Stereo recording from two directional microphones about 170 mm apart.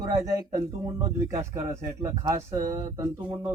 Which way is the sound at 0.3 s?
20° right (ahead or behind).